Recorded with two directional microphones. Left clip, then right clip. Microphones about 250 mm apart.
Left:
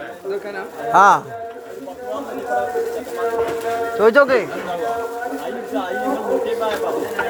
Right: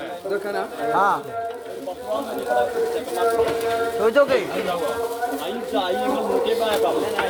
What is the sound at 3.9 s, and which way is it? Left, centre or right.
Speech, left.